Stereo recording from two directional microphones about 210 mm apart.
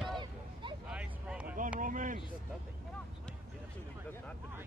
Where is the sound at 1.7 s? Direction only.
40° right (ahead or behind).